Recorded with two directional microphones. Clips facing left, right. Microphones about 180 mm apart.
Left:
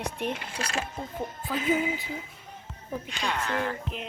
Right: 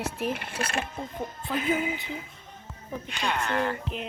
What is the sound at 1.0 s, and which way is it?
Speech, centre (ahead or behind).